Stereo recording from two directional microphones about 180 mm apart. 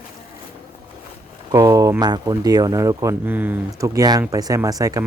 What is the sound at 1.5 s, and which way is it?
Speech, 20° right (ahead or behind).